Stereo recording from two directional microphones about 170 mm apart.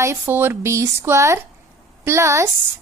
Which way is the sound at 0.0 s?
15° right (ahead or behind).